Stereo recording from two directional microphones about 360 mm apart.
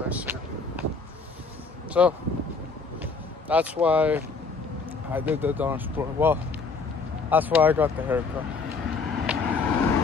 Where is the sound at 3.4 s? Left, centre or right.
Centre.